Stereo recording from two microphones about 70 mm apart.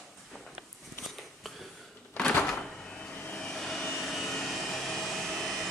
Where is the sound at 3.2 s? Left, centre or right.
Centre.